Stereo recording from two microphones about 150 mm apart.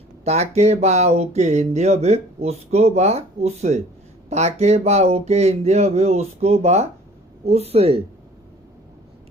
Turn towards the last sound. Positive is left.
turn(degrees=-40)  # may be behind; listen again after turning